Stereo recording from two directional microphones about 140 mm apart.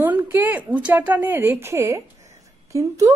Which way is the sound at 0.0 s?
15° right (ahead or behind).